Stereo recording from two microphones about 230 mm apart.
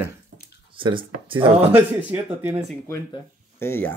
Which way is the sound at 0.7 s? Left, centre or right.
Right.